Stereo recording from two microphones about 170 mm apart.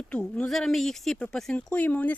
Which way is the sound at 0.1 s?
5° left (ahead or behind).